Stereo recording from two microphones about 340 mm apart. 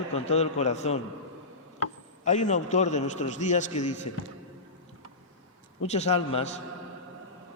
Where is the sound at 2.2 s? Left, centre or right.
Left.